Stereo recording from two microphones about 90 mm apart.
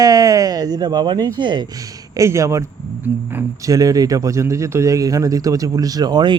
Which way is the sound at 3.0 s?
20° right (ahead or behind).